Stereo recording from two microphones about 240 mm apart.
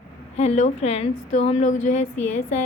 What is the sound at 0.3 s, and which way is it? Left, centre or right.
A woman's voice, left.